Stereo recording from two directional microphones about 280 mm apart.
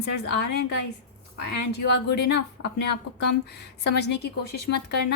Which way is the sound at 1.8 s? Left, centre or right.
Left.